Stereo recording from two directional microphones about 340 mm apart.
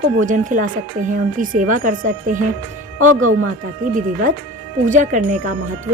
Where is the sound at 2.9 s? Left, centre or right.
Right.